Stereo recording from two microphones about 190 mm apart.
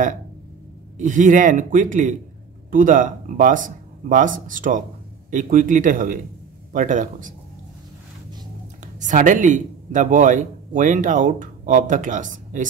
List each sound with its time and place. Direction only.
0.9 s speech: 40° right (ahead or behind)
9.0 s speech: 40° right (ahead or behind)